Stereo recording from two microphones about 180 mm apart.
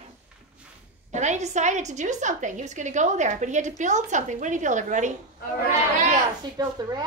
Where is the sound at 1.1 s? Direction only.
40° right (ahead or behind).